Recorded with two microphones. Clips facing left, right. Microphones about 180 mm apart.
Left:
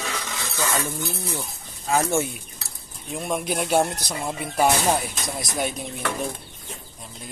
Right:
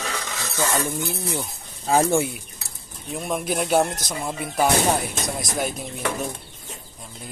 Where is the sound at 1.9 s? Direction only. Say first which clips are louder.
Right 3 dB; 30° right (ahead or behind).